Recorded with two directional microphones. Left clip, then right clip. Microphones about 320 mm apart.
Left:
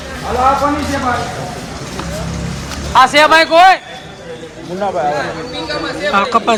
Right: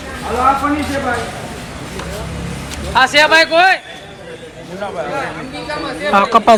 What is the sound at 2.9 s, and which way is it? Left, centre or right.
Speech, left.